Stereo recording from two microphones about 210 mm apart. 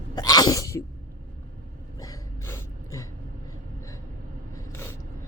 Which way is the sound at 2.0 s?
15° left (ahead or behind).